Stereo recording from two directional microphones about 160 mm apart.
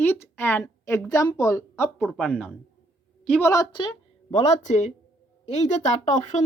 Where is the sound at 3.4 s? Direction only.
20° left (ahead or behind).